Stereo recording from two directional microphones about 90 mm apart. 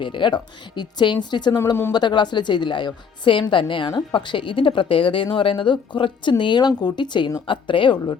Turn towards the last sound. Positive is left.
turn(degrees=65)  # may be behind; listen again after turning